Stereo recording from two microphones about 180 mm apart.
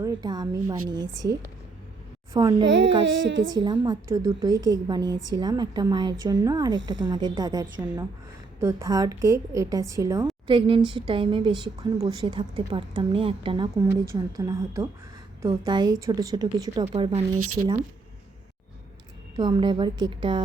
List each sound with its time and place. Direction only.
0.0 s a woman's voice: 20° right (ahead or behind)
2.4 s a woman's voice: 25° right (ahead or behind)
2.6 s speech: 90° right
3.5 s a woman's voice: 25° right (ahead or behind)
14.1 s a woman's voice: 20° right (ahead or behind)
16.8 s speech: 35° right (ahead or behind)
19.4 s a woman's voice: 25° right (ahead or behind)